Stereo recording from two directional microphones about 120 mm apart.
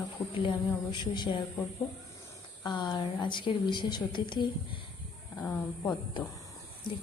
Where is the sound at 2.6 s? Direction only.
40° left (ahead or behind).